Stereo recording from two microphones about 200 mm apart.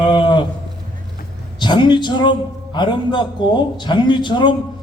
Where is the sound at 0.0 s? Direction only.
25° left (ahead or behind).